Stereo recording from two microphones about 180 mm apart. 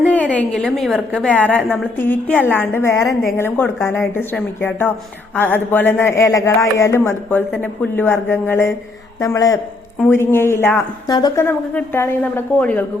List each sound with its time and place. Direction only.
0.0 s speech: 10° left (ahead or behind)